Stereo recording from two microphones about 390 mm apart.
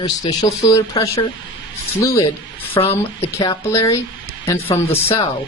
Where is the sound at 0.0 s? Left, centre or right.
Centre.